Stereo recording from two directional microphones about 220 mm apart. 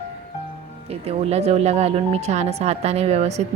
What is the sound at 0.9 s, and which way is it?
Speech, 30° right (ahead or behind).